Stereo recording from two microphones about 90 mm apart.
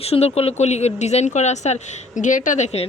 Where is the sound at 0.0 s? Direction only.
90° left.